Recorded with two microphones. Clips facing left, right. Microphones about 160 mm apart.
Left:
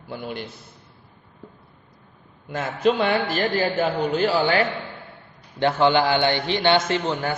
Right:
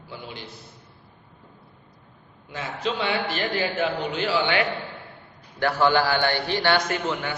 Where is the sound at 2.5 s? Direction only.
50° left (ahead or behind).